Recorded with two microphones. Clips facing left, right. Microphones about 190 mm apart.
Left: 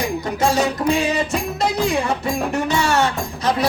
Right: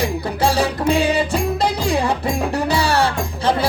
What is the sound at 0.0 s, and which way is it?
Music, 30° right (ahead or behind).